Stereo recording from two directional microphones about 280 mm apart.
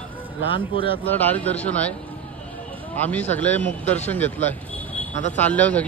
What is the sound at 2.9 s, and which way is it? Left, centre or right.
A man's voice, centre.